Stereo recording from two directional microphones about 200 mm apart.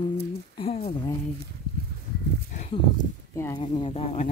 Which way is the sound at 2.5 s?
35° left (ahead or behind).